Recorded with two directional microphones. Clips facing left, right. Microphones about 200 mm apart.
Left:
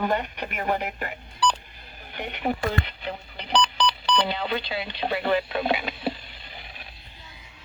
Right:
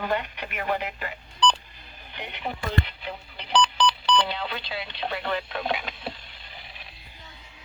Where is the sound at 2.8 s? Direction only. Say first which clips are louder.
Left 3 dB; centre (ahead or behind).